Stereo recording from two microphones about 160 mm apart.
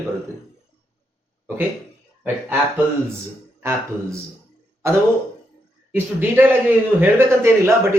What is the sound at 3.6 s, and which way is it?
Speech, 15° right (ahead or behind).